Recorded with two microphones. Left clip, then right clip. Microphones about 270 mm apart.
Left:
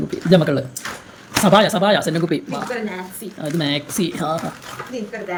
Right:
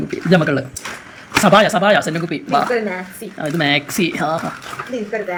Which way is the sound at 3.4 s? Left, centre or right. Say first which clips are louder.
Right 5 dB; centre.